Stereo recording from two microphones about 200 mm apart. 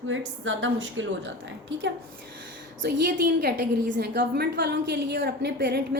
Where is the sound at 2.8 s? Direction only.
55° right (ahead or behind).